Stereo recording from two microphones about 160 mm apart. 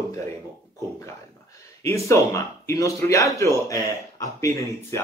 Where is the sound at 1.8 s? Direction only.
20° left (ahead or behind).